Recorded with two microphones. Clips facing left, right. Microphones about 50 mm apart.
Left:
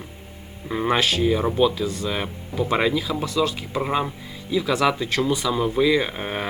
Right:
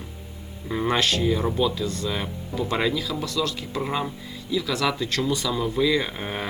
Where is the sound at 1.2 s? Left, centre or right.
Centre.